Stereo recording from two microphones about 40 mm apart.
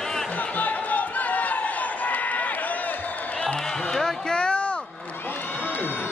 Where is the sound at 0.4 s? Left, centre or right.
Left.